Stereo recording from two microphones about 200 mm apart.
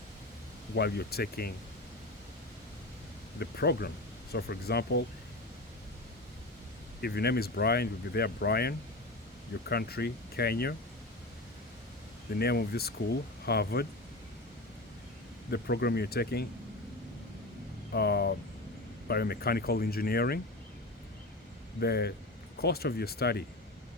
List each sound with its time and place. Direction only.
0.8 s speech: 55° left (ahead or behind)
3.3 s speech: 55° left (ahead or behind)
7.0 s speech: 55° left (ahead or behind)
12.4 s speech: 50° left (ahead or behind)
15.4 s speech: 55° left (ahead or behind)
17.9 s speech: 50° left (ahead or behind)
21.8 s speech: 50° left (ahead or behind)